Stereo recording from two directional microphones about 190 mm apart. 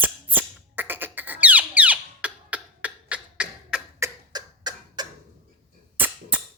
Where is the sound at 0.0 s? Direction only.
10° right (ahead or behind).